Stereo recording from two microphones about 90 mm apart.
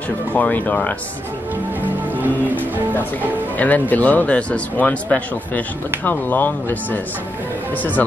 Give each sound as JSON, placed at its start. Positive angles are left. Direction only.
{"t": 0.3, "sound": "speech", "side_deg": 20}
{"t": 3.5, "sound": "a man's voice", "side_deg": 20}